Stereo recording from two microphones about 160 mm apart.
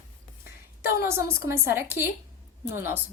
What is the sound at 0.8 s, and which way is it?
A woman's voice, 15° right (ahead or behind).